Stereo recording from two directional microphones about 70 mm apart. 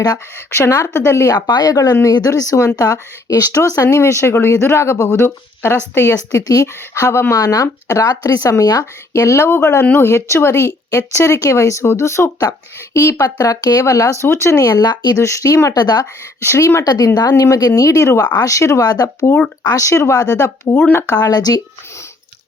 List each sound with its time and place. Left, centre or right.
0.3 s speech: left
1.3 s speech: left
7.3 s speech: left
7.9 s speech: left
8.1 s speech: left
8.8 s speech: left
15.1 s speech: left
16.6 s speech: left
17.2 s speech: left
18.9 s speech: left
19.6 s speech: left
20.3 s speech: left